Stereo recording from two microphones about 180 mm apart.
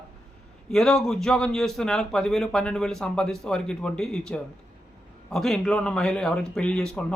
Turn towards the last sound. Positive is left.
turn(degrees=5)  # may be behind; listen again after turning